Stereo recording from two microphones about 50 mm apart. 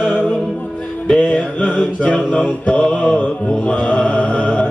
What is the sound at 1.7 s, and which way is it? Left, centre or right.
Mantra, centre.